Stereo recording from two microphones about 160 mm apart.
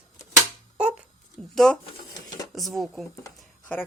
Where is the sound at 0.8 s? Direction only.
5° right (ahead or behind).